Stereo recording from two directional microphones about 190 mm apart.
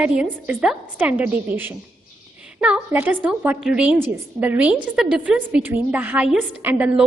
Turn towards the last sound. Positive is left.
turn(degrees=-10)  # may be behind; listen again after turning